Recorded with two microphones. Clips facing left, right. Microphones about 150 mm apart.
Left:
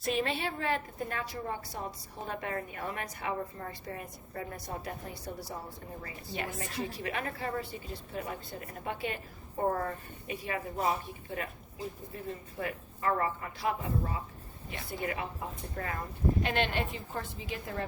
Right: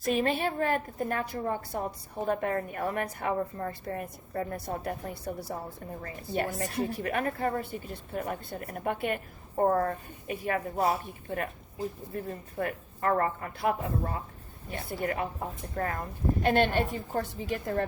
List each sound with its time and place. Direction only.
0.0 s a woman's voice: 45° right (ahead or behind)
6.0 s a woman's voice: 45° right (ahead or behind)
12.1 s a woman's voice: 50° right (ahead or behind)